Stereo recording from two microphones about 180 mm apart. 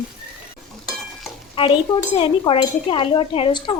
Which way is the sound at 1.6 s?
30° left (ahead or behind).